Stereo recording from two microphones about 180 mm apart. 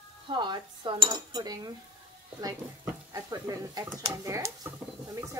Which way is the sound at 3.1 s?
20° right (ahead or behind).